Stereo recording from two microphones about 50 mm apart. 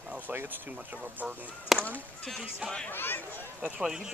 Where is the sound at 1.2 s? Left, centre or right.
Right.